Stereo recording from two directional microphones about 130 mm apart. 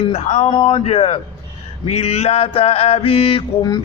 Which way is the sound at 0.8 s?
50° left (ahead or behind).